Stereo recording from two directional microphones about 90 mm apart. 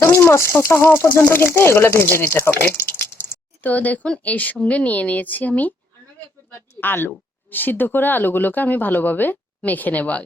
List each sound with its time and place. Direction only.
0.0 s speech: 25° left (ahead or behind)
6.7 s speech: 25° left (ahead or behind)